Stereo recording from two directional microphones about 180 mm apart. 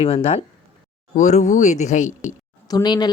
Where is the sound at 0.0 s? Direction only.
35° left (ahead or behind).